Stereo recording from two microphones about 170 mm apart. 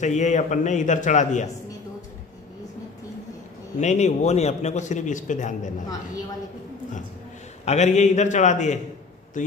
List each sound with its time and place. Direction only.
0.0 s a man's voice: 45° left (ahead or behind)
3.8 s a man's voice: 40° left (ahead or behind)
7.6 s a man's voice: 40° left (ahead or behind)